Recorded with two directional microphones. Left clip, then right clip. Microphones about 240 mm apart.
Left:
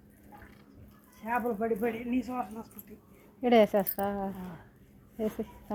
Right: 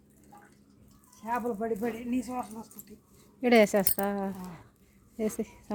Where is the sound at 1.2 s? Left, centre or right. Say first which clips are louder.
Left 1 dB; centre.